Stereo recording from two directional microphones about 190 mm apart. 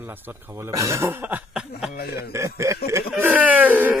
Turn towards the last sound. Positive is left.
turn(degrees=-10)  # may be behind; listen again after turning